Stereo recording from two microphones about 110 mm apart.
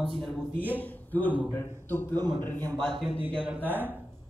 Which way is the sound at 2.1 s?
40° right (ahead or behind).